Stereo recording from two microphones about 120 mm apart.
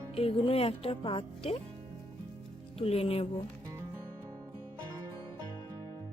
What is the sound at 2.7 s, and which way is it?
Speech, 55° left (ahead or behind).